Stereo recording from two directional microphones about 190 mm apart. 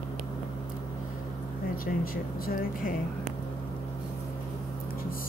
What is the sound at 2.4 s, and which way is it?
Speech, 50° left (ahead or behind).